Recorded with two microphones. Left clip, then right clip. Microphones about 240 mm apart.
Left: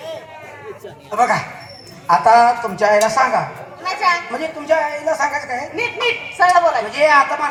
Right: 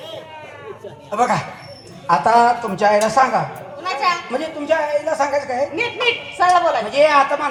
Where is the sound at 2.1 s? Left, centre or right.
Left.